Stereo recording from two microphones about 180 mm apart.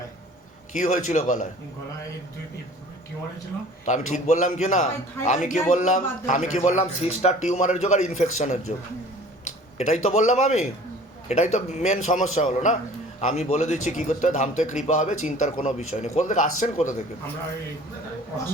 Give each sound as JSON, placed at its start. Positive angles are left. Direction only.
{"t": 0.7, "sound": "a man's voice", "side_deg": 45}
{"t": 3.8, "sound": "a man's voice", "side_deg": 45}
{"t": 9.7, "sound": "a man's voice", "side_deg": 40}